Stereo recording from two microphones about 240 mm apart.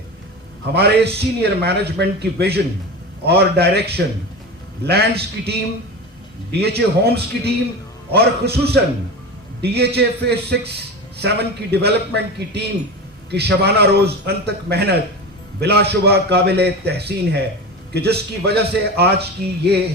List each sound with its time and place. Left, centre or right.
0.7 s a man's voice: right